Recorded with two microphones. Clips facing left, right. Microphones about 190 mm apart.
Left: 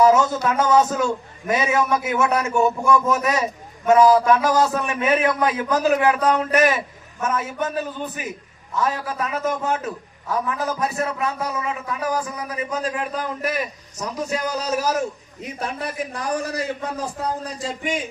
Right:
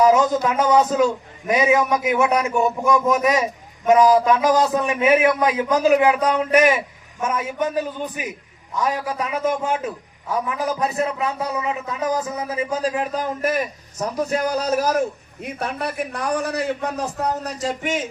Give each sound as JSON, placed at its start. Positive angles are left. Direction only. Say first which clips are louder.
{"t": 0.0, "sound": "a man's voice", "louder": "right 1 dB", "side_deg": -15}